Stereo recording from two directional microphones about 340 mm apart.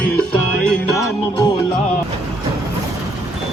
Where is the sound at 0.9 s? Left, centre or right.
Centre.